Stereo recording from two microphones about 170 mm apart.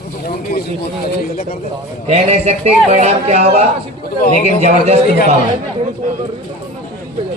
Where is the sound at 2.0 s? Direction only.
40° right (ahead or behind).